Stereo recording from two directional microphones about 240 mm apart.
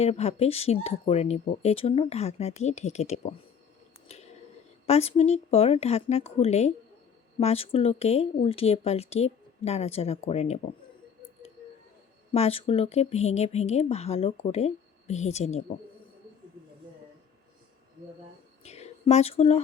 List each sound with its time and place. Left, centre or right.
0.0 s speech: left
4.9 s speech: left
12.3 s speech: left
18.6 s a sound: left